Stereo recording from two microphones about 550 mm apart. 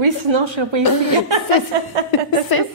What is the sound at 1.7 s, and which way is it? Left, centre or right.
Chuckle, right.